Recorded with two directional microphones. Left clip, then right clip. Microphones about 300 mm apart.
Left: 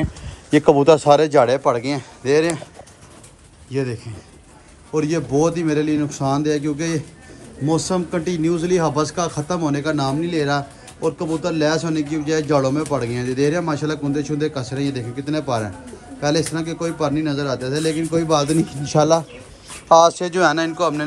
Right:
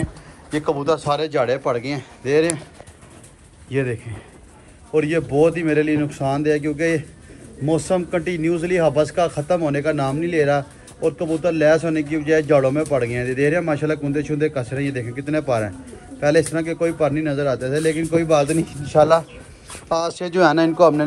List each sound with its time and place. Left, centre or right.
0.5 s speech: left
1.4 s a man's voice: centre
3.7 s a man's voice: centre
8.1 s a man's voice: centre
20.3 s a man's voice: centre